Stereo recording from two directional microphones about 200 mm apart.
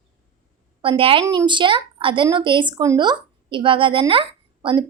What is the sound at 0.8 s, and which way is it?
Speech, 25° right (ahead or behind).